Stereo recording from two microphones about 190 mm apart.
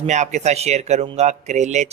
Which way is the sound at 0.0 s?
40° right (ahead or behind).